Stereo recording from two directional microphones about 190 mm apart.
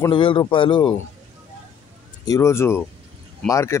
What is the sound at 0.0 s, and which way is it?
Speech, 25° left (ahead or behind).